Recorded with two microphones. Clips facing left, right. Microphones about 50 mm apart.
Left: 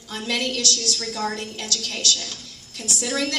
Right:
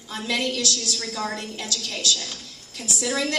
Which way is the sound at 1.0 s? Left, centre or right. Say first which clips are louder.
Left 2 dB; right.